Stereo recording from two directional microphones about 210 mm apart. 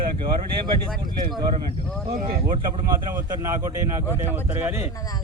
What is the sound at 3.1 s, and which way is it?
A man's voice, 15° right (ahead or behind).